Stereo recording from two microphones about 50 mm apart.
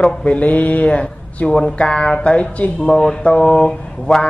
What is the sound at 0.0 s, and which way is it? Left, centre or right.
Speech, left.